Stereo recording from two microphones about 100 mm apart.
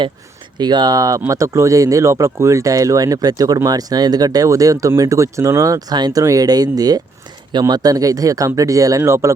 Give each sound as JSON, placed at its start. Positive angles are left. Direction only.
{"t": 0.6, "sound": "speech", "side_deg": -45}